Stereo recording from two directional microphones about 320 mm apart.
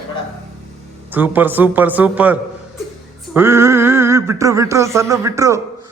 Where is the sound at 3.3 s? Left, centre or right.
Centre.